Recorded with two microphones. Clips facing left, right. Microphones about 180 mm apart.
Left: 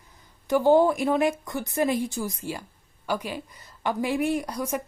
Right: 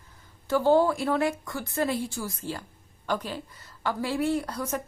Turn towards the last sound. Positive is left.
turn(degrees=10)  # may be behind; listen again after turning